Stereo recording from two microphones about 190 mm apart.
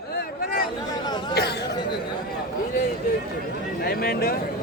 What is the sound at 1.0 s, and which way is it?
Speech, 20° left (ahead or behind).